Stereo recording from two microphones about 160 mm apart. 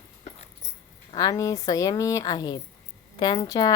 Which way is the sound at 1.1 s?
25° left (ahead or behind).